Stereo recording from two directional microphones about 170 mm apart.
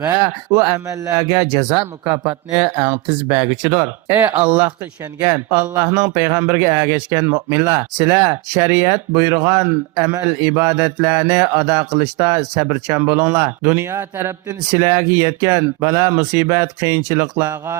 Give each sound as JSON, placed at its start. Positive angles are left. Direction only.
{"t": 0.2, "sound": "speech", "side_deg": -20}
{"t": 2.7, "sound": "speech", "side_deg": -10}